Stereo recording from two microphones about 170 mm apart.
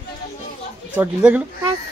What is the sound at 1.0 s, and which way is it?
Speech, 5° right (ahead or behind).